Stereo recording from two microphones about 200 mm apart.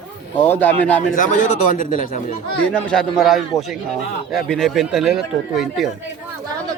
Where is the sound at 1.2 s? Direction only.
40° left (ahead or behind).